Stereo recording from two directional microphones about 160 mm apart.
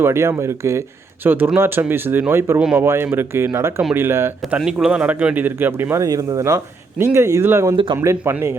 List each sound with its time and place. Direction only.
0.0 s speech: 15° right (ahead or behind)